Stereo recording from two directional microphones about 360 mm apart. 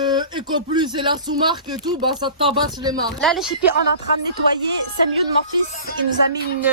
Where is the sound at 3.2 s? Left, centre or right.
Centre.